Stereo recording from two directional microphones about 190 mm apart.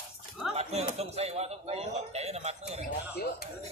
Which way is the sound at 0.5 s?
35° right (ahead or behind).